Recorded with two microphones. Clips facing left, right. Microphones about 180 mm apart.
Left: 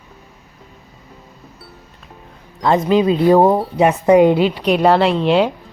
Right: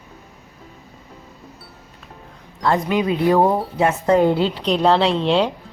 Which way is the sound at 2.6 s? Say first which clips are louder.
Left 5 dB; 20° left (ahead or behind).